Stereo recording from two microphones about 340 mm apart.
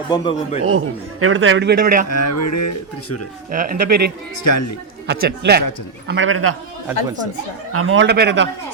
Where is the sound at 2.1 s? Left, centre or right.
Left.